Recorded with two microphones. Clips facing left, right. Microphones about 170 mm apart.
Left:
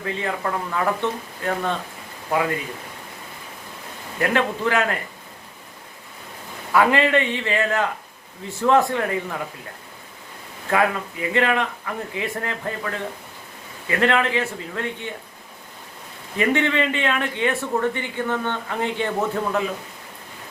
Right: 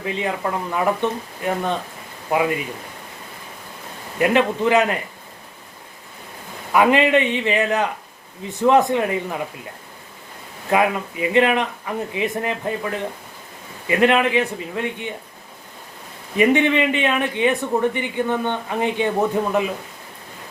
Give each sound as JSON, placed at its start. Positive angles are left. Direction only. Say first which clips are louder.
{"t": 0.0, "sound": "a man's voice", "louder": "right 2 dB", "side_deg": -15}
{"t": 4.2, "sound": "a man's voice", "louder": "right 4 dB", "side_deg": -20}
{"t": 6.7, "sound": "a man's voice", "louder": "right 2 dB", "side_deg": -20}
{"t": 10.7, "sound": "a man's voice", "louder": "right 2 dB", "side_deg": -20}
{"t": 16.4, "sound": "a man's voice", "louder": "right 4 dB", "side_deg": -15}